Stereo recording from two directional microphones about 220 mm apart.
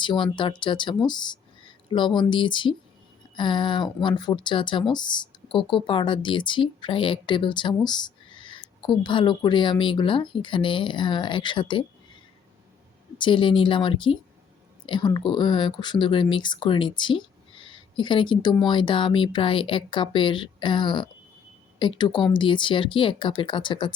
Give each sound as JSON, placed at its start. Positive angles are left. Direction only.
{"t": 0.0, "sound": "speech", "side_deg": 20}
{"t": 13.1, "sound": "speech", "side_deg": 20}